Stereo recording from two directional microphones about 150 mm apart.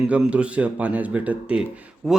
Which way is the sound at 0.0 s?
5° right (ahead or behind).